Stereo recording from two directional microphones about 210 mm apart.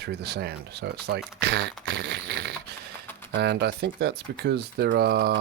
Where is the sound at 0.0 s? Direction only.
50° right (ahead or behind).